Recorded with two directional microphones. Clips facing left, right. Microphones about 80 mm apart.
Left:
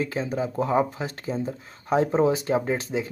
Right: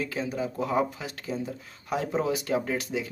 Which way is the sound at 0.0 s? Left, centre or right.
Left.